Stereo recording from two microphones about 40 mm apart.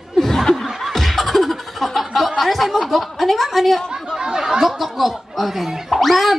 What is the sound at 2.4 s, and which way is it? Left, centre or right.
A woman's voice, centre.